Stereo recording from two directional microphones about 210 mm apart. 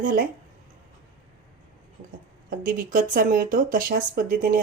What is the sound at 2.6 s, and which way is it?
Speech, 40° right (ahead or behind).